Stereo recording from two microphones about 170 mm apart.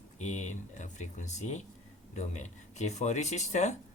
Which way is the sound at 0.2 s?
45° left (ahead or behind).